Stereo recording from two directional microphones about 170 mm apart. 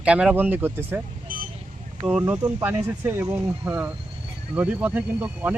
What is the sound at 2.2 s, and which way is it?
Speech, 15° right (ahead or behind).